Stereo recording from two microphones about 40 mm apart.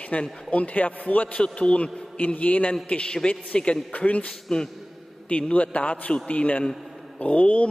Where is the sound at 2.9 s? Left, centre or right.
Left.